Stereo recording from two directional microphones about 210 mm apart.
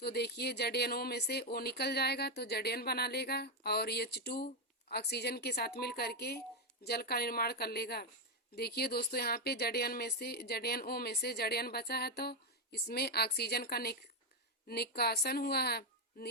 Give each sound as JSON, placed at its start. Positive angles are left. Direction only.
{"t": 0.0, "sound": "speech", "side_deg": 50}